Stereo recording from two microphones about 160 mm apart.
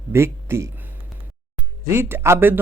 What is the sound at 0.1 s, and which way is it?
Speech, 15° right (ahead or behind).